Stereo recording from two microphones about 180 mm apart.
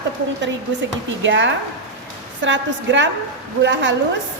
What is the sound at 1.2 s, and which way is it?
A woman's voice, 90° right.